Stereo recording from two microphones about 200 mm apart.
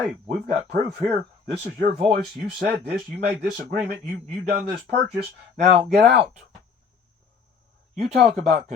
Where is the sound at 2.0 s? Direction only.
50° right (ahead or behind).